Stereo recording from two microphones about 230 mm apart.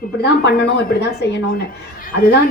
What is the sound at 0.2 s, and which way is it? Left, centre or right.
A woman's voice, left.